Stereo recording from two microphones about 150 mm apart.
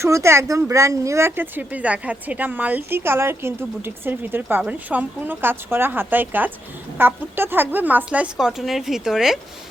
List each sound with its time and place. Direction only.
0.0 s a woman's voice: 20° right (ahead or behind); by 9.4 s centre (ahead or behind)